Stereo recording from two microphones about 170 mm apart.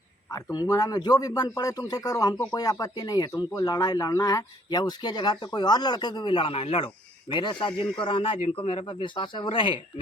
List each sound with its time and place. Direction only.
0.5 s speech: 20° left (ahead or behind)